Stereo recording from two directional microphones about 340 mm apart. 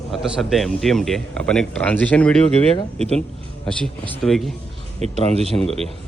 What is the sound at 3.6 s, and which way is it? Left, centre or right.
Speech, centre.